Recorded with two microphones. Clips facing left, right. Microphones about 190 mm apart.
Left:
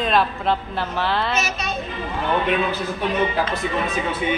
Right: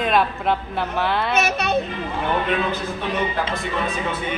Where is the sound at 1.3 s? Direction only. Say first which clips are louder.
Right 4 dB; 60° right (ahead or behind).